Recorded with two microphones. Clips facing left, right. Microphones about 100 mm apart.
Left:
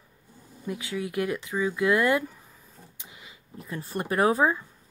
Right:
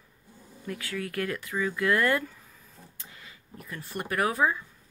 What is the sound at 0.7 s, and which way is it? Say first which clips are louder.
Speech: left 3 dB; 20° left (ahead or behind).